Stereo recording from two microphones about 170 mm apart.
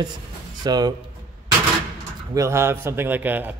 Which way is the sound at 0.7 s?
25° right (ahead or behind).